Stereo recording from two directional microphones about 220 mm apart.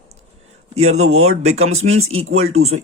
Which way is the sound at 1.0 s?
70° right (ahead or behind).